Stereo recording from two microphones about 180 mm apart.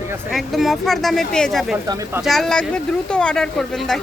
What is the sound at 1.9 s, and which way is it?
Speech, 20° right (ahead or behind).